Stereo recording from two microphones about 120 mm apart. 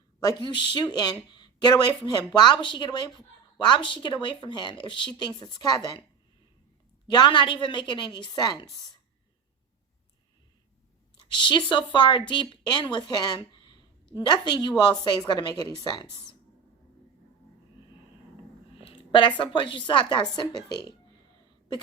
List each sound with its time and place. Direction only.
0.2 s speech: 35° left (ahead or behind)
7.1 s speech: 40° left (ahead or behind)
11.3 s a woman's voice: 40° left (ahead or behind)
18.8 s a woman's voice: 45° left (ahead or behind)